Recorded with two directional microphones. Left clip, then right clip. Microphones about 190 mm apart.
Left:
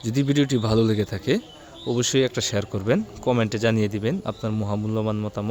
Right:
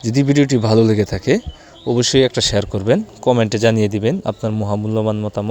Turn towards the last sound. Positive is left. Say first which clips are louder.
# right 7 dB
turn(degrees=-20)  # may be behind; listen again after turning